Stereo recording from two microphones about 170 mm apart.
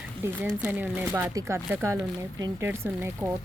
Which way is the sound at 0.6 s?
10° right (ahead or behind).